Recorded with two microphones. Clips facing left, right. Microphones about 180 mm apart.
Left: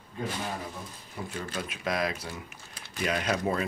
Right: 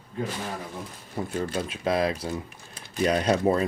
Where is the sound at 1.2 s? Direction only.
35° right (ahead or behind).